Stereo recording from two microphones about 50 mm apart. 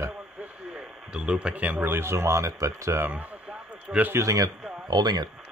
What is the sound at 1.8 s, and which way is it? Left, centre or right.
Speech, right.